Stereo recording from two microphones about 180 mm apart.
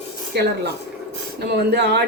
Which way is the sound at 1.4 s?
65° right (ahead or behind).